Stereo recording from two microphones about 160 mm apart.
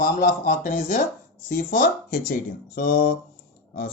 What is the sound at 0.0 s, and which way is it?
Speech, 60° left (ahead or behind).